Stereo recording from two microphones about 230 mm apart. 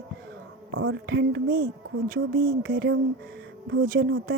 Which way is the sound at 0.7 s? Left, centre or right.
Right.